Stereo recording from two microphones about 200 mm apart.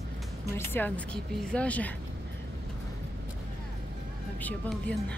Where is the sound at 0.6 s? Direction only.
10° left (ahead or behind).